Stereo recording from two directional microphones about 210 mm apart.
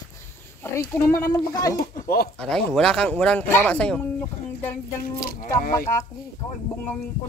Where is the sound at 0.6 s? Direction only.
10° left (ahead or behind).